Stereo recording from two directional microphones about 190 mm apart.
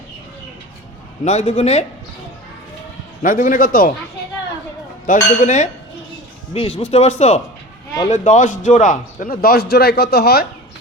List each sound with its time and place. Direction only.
1.2 s a man's voice: 35° left (ahead or behind)
3.2 s a man's voice: 45° left (ahead or behind)
5.0 s a man's voice: 40° left (ahead or behind)
6.5 s a man's voice: 30° left (ahead or behind); by 10.4 s 55° left (ahead or behind)